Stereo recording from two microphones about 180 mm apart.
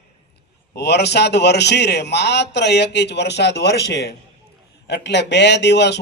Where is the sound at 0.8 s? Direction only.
70° left (ahead or behind).